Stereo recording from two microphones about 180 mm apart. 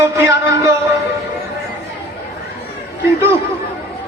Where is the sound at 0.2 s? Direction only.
15° right (ahead or behind).